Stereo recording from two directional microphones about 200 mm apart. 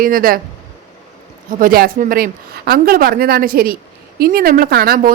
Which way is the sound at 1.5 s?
45° right (ahead or behind).